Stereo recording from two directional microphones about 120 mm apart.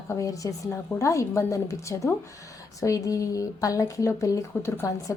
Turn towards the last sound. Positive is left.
turn(degrees=25)  # may be behind; listen again after turning